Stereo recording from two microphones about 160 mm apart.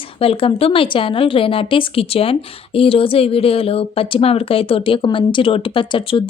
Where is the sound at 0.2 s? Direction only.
35° left (ahead or behind).